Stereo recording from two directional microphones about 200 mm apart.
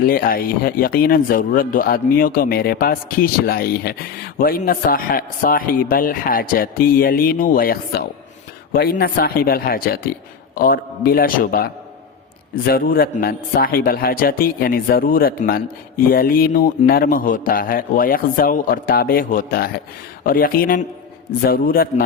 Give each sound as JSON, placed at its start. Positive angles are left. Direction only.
{"t": 0.1, "sound": "speech", "side_deg": 45}